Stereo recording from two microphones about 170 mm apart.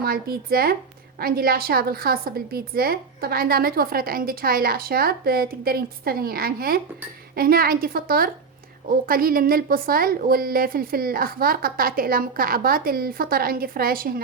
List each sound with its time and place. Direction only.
0.0 s a woman's voice: 60° right (ahead or behind)